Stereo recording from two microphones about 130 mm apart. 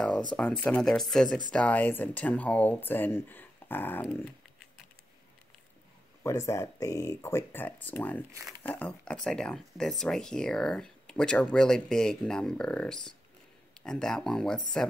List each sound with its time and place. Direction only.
0.4 s speech: 10° left (ahead or behind)
6.2 s speech: 25° left (ahead or behind); by 14.6 s 5° left (ahead or behind)